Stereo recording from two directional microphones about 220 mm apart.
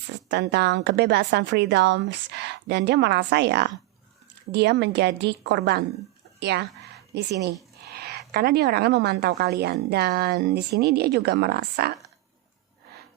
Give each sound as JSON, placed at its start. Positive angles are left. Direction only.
{"t": 0.3, "sound": "a woman's voice", "side_deg": -50}